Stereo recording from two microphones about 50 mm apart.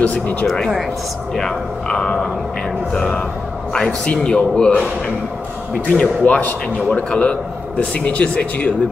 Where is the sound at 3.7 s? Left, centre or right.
Left.